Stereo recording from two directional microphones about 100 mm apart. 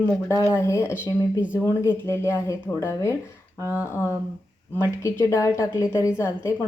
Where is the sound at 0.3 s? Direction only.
30° left (ahead or behind).